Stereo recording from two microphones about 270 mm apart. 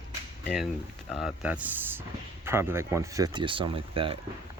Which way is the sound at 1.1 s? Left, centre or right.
Centre.